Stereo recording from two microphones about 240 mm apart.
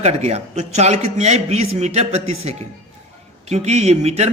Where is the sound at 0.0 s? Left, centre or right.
Right.